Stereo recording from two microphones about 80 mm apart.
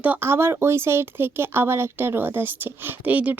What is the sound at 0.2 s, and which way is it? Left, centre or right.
A woman's voice, right.